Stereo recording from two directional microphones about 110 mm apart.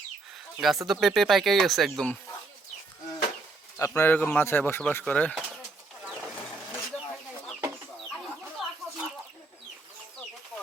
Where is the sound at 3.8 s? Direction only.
25° left (ahead or behind).